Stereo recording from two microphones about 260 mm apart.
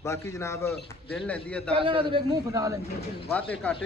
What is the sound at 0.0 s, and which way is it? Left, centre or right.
A man's voice, centre.